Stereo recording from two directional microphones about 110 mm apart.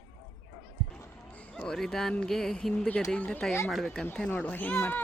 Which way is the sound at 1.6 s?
5° left (ahead or behind).